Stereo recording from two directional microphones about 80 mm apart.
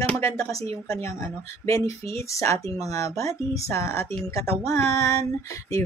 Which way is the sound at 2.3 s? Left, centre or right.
Left.